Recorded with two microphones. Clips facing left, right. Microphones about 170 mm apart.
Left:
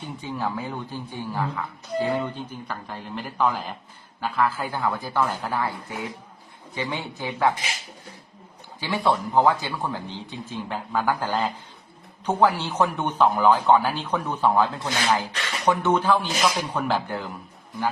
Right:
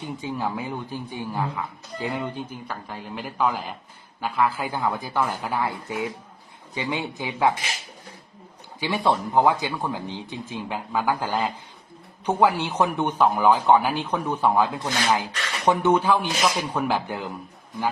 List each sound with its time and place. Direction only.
0.0 s a man's voice: 15° right (ahead or behind)
9.0 s a man's voice: 15° right (ahead or behind)